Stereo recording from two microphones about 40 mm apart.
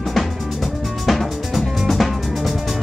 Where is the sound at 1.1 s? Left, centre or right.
Centre.